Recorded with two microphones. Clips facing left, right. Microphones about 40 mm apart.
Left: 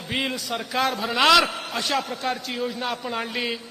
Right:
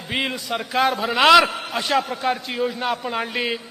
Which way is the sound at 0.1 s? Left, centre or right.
Centre.